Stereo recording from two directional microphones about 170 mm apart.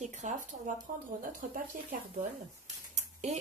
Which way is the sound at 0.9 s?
55° right (ahead or behind).